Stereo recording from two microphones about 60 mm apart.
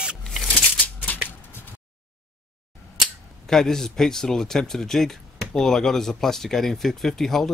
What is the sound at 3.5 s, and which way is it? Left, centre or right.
Speech, centre.